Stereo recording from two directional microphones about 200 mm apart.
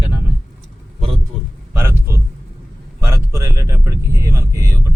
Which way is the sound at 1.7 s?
10° right (ahead or behind).